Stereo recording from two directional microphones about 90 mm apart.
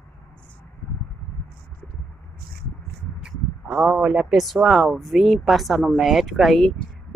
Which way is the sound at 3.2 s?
5° right (ahead or behind).